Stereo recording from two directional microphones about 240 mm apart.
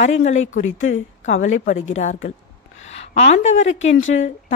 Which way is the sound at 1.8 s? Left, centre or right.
Left.